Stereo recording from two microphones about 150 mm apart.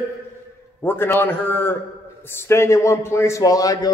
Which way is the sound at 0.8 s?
15° left (ahead or behind).